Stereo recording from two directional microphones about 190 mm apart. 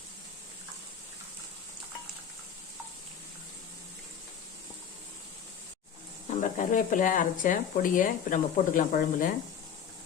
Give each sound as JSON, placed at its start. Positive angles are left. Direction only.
{"t": 6.3, "sound": "speech", "side_deg": 40}